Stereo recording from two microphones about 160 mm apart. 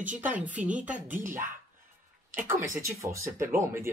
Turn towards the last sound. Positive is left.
turn(degrees=-15)  # may be behind; listen again after turning